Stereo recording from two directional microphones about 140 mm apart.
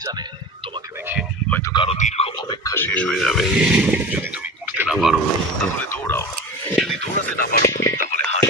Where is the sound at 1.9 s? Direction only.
55° left (ahead or behind).